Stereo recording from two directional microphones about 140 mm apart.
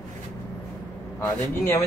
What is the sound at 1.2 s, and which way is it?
Speech, 15° left (ahead or behind).